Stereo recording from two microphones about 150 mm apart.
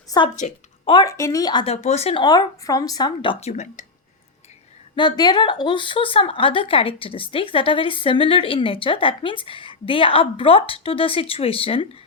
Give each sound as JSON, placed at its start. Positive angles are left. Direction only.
{"t": 0.1, "sound": "a woman's voice", "side_deg": 25}
{"t": 1.1, "sound": "speech", "side_deg": 20}
{"t": 1.6, "sound": "speech", "side_deg": 45}
{"t": 2.2, "sound": "speech", "side_deg": 25}
{"t": 3.5, "sound": "speech", "side_deg": 50}
{"t": 4.9, "sound": "a woman's voice", "side_deg": 30}